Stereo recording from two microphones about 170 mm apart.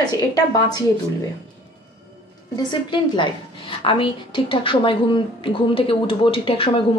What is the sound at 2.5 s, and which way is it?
A woman's voice, 25° left (ahead or behind).